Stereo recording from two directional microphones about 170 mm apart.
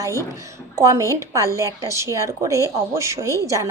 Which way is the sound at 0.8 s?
15° right (ahead or behind).